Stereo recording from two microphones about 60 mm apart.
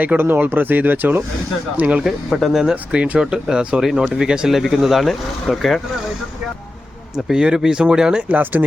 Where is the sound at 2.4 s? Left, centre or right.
Centre.